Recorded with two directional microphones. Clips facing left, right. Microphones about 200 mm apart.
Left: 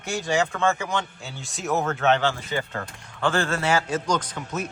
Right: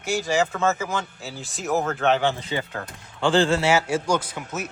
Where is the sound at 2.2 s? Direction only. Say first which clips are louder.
Right 1 dB; 20° right (ahead or behind).